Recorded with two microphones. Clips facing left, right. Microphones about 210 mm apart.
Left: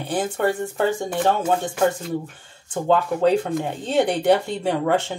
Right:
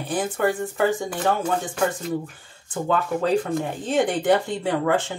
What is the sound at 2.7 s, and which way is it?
Speech, 25° left (ahead or behind).